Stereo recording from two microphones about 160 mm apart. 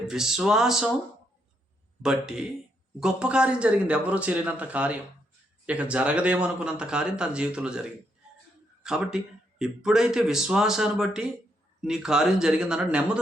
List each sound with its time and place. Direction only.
0.1 s a man's voice: 5° right (ahead or behind)
2.0 s speech: 5° right (ahead or behind)
8.8 s a man's voice: 5° right (ahead or behind)